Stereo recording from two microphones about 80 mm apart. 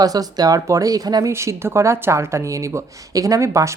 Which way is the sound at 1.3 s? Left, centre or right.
Right.